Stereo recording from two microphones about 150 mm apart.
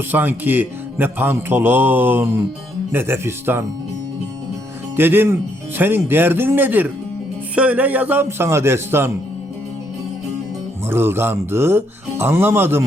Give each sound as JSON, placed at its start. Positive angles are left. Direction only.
{"t": 0.1, "sound": "a man's voice", "side_deg": -15}
{"t": 4.9, "sound": "a man's voice", "side_deg": -15}
{"t": 10.8, "sound": "a man's voice", "side_deg": -15}